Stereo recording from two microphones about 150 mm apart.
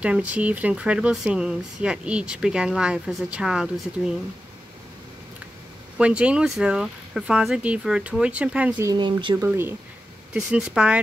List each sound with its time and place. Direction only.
0.0 s speech: 10° right (ahead or behind)
5.9 s speech: 5° right (ahead or behind)
8.7 s speech: 25° right (ahead or behind)
9.4 s speech: 15° right (ahead or behind)